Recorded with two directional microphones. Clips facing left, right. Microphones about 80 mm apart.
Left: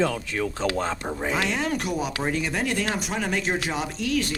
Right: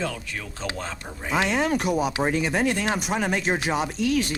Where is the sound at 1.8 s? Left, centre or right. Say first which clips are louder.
Right 4 dB; centre.